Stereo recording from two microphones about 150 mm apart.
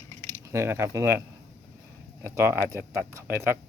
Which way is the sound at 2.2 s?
15° right (ahead or behind).